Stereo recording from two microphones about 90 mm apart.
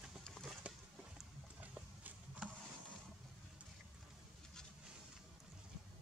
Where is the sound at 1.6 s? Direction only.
15° right (ahead or behind).